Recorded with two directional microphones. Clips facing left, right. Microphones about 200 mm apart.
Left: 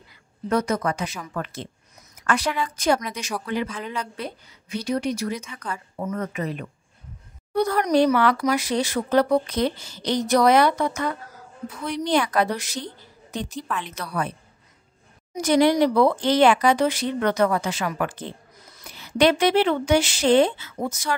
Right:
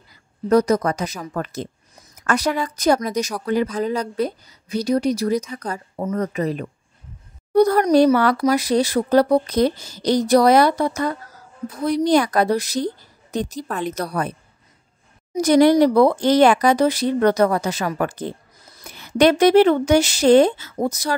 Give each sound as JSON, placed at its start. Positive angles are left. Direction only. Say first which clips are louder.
{"t": 0.1, "sound": "a woman's voice", "louder": "right 7 dB", "side_deg": -40}
{"t": 15.3, "sound": "speech", "louder": "right 5 dB", "side_deg": -40}